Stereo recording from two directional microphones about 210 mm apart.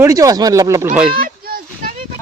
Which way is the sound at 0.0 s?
15° right (ahead or behind).